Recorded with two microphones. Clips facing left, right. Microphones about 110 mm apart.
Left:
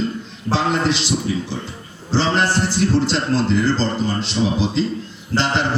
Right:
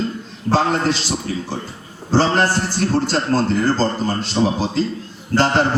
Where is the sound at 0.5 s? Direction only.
45° right (ahead or behind).